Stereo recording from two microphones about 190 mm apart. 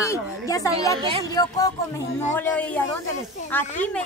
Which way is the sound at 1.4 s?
20° left (ahead or behind).